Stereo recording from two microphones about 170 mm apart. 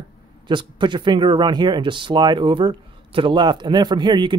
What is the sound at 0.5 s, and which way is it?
Speech, 30° right (ahead or behind).